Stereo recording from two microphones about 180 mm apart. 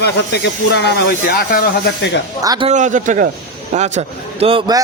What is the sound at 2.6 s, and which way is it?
A man's voice, 45° right (ahead or behind).